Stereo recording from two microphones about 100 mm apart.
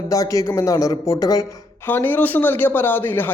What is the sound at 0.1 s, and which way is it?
Speech, 35° left (ahead or behind).